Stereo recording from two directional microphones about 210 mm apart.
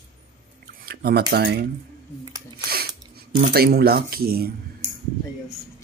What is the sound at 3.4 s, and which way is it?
Speech, 45° right (ahead or behind).